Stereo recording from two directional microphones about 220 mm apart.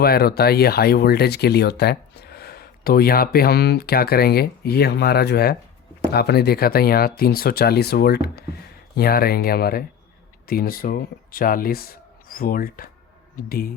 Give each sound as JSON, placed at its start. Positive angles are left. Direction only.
{"t": 0.0, "sound": "speech", "side_deg": 45}